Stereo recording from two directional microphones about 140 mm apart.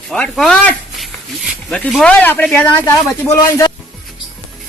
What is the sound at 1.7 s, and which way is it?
Speech, 5° left (ahead or behind).